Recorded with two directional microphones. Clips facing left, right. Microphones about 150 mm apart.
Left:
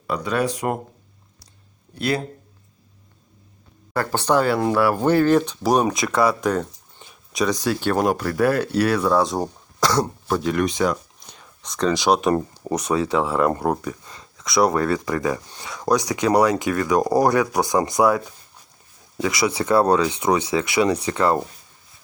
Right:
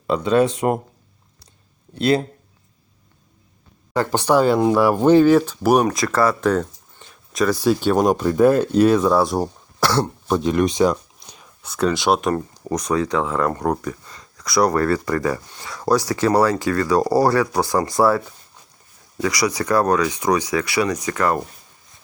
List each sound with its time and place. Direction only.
0.1 s speech: 25° right (ahead or behind)
2.0 s speech: 25° right (ahead or behind)
3.9 s speech: 15° right (ahead or behind)
6.4 s a sound: 10° left (ahead or behind)
7.9 s speech: 15° right (ahead or behind)
10.2 s speech: 20° right (ahead or behind)
11.3 s speech: 5° right (ahead or behind)
12.3 s speech: 25° left (ahead or behind)
12.6 s speech: 10° left (ahead or behind)
15.9 s speech: 15° left (ahead or behind)